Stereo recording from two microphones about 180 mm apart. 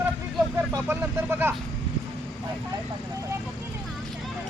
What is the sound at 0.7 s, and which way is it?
Speech, 15° right (ahead or behind).